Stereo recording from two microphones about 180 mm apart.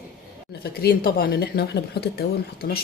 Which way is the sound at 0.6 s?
60° left (ahead or behind).